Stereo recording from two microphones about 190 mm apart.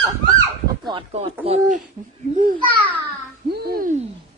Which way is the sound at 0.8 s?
30° right (ahead or behind).